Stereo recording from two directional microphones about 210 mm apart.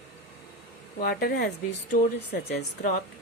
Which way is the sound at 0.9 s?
45° left (ahead or behind).